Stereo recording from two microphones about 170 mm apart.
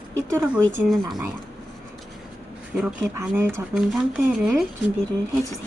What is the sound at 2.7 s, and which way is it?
Speech, 5° right (ahead or behind).